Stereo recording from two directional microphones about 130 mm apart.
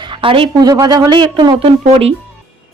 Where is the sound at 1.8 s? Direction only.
55° right (ahead or behind).